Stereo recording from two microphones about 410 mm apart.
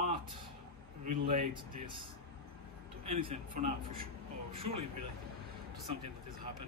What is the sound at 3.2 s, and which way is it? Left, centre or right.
Speech, centre.